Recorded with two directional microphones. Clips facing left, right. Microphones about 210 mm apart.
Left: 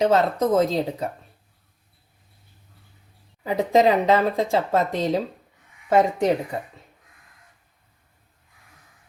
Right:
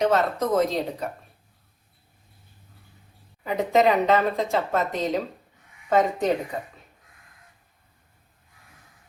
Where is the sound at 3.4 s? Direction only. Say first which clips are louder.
Left 2 dB; 30° left (ahead or behind).